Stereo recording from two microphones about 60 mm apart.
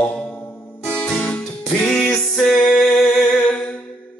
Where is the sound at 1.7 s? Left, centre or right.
Centre.